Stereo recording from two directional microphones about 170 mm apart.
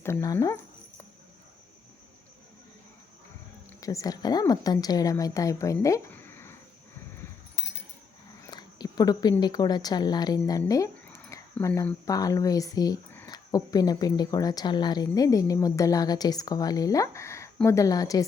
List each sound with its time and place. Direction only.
0.0 s speech: 15° left (ahead or behind)
3.7 s a woman's voice: 20° left (ahead or behind)
8.4 s a sound: 25° left (ahead or behind)
9.4 s speech: 25° left (ahead or behind)